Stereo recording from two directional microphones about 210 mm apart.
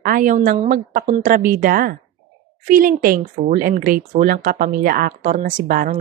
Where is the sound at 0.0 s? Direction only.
40° right (ahead or behind).